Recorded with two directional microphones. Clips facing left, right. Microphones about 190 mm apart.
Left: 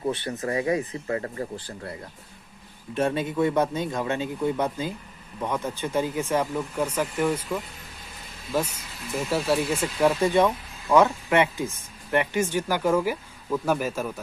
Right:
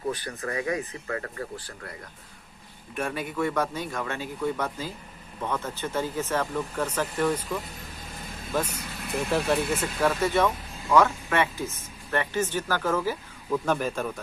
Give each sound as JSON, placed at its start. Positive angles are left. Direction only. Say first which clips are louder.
{"t": 0.1, "sound": "speech", "louder": "left 4 dB", "side_deg": 25}
{"t": 9.1, "sound": "speech", "louder": "left 1 dB", "side_deg": 5}